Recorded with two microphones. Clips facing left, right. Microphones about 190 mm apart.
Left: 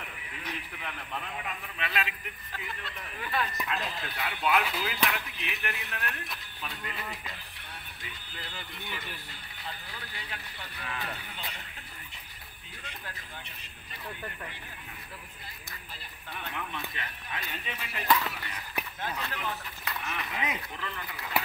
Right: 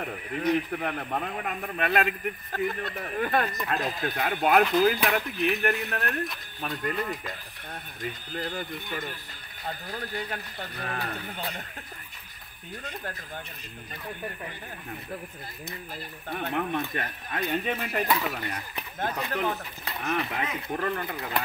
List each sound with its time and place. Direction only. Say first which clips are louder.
0.0 s speech: right 14 dB; 50° right (ahead or behind)
16.3 s speech: right 10 dB; 50° right (ahead or behind)